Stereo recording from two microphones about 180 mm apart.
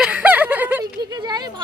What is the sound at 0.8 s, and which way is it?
Speech, 20° right (ahead or behind).